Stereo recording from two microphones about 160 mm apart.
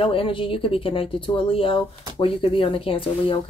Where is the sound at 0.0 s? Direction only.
35° left (ahead or behind).